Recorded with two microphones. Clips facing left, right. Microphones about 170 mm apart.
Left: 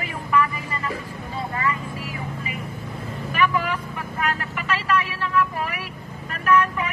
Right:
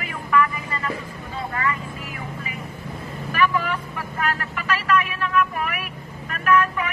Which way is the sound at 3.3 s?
15° left (ahead or behind).